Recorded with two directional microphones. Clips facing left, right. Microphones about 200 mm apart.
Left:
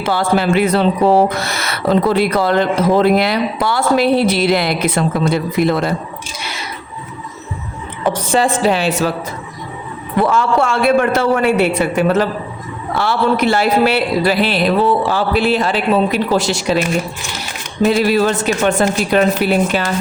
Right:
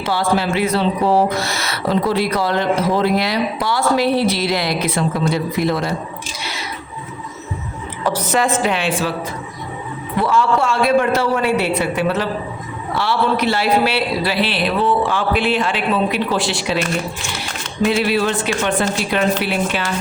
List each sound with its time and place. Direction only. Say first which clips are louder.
0.1 s speech: left 3 dB; 55° left (ahead or behind)
8.2 s a woman's voice: left 3 dB; 30° left (ahead or behind)
10.2 s a man's voice: left 2 dB; 55° left (ahead or behind)
17.8 s a man's voice: left 4 dB; 40° left (ahead or behind)